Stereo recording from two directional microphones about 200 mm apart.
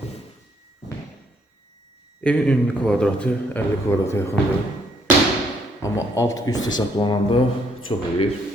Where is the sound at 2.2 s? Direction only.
5° left (ahead or behind).